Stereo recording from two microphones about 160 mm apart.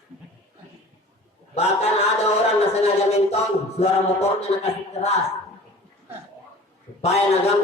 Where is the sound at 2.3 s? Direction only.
40° left (ahead or behind).